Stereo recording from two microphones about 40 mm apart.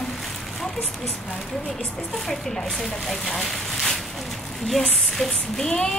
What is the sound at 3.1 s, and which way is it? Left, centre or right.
A woman's voice, centre.